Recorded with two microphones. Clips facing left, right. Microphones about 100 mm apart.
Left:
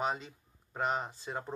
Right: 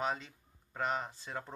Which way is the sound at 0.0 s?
15° left (ahead or behind).